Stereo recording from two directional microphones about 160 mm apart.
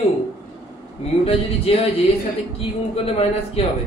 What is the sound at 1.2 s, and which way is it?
Speech, 35° left (ahead or behind).